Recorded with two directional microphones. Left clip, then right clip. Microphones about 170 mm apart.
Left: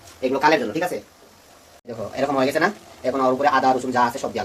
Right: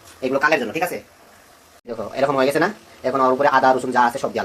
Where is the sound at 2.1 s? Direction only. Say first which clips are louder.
Right 3 dB; 15° right (ahead or behind).